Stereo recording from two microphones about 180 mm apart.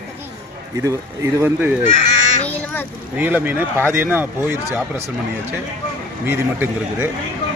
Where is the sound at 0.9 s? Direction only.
15° right (ahead or behind).